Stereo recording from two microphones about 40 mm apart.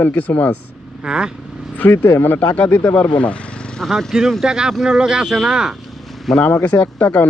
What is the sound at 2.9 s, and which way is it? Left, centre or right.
Speech, left.